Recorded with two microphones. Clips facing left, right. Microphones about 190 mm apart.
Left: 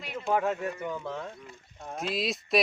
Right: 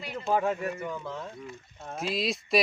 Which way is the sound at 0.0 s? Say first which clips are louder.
Right 1 dB; centre (ahead or behind).